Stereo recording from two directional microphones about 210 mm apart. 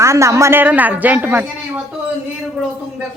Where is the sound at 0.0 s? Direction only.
15° right (ahead or behind).